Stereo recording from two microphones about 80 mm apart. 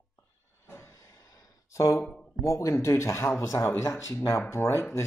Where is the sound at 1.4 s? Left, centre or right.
Left.